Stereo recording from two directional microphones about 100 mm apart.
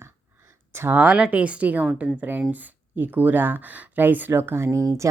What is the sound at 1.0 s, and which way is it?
Speech, 10° right (ahead or behind).